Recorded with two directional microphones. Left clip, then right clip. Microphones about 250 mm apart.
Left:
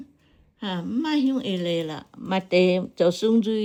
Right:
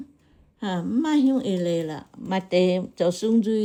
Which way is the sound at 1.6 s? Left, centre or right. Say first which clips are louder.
Right 1 dB; left.